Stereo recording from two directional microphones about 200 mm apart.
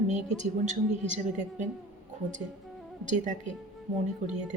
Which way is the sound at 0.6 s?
35° right (ahead or behind).